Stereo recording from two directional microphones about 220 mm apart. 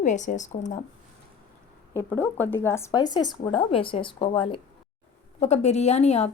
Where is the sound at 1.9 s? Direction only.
10° left (ahead or behind).